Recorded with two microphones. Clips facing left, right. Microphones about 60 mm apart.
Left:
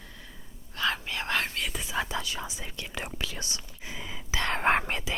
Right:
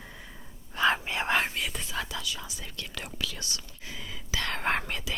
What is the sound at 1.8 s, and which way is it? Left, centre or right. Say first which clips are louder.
Whispering: left 4 dB; centre.